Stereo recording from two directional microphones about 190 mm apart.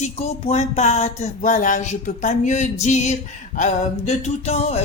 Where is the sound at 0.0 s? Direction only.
35° left (ahead or behind).